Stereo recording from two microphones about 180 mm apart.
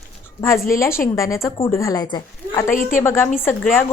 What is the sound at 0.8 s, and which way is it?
A woman's voice, 15° left (ahead or behind).